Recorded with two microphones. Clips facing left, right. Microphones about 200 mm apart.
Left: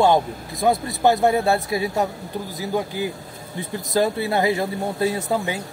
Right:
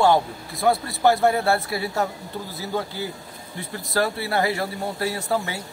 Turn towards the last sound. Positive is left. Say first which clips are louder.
# left 2 dB
turn(degrees=20)  # may be behind; listen again after turning